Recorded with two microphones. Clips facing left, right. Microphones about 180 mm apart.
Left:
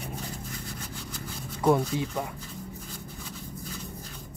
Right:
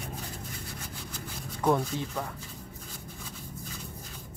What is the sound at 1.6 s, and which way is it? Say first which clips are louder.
Speech: left 3 dB; 10° left (ahead or behind).